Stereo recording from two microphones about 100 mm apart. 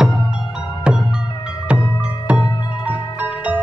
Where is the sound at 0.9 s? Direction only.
10° right (ahead or behind).